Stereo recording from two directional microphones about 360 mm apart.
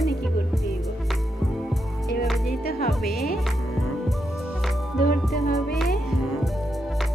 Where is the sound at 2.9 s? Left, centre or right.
Centre.